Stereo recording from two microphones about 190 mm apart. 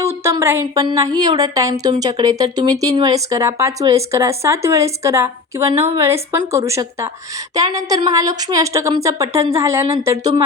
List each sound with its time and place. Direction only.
0.0 s speech: 15° right (ahead or behind)